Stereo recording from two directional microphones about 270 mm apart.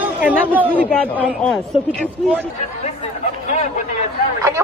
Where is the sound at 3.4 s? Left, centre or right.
Left.